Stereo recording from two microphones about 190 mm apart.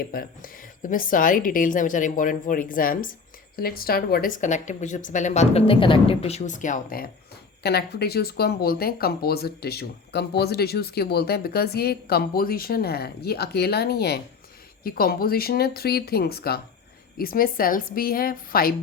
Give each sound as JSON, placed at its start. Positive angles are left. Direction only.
{"t": 0.0, "sound": "speech", "side_deg": 50}
{"t": 7.6, "sound": "speech", "side_deg": 60}